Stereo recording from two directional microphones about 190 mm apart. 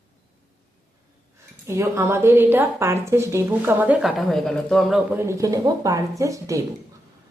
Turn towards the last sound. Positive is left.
turn(degrees=-15)  # may be behind; listen again after turning